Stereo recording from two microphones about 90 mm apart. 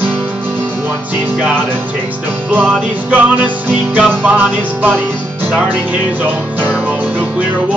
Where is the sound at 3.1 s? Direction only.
15° right (ahead or behind).